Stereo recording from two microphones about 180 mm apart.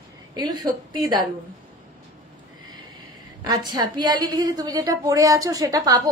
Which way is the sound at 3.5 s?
20° right (ahead or behind).